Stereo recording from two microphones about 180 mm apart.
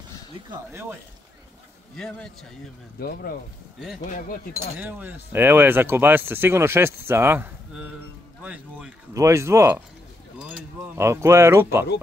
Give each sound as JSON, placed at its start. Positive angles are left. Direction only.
{"t": 0.7, "sound": "speech", "side_deg": -15}
{"t": 2.0, "sound": "a man's voice", "side_deg": 5}
{"t": 3.0, "sound": "speech", "side_deg": 55}
{"t": 4.7, "sound": "speech", "side_deg": -10}